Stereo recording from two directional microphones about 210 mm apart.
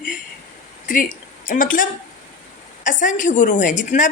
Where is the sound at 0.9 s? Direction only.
40° left (ahead or behind).